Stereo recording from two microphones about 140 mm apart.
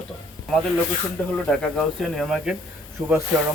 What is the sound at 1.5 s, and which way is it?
Speech, 5° left (ahead or behind).